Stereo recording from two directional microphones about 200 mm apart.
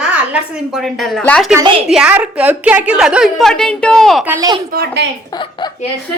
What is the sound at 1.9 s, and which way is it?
A woman's voice, 5° right (ahead or behind).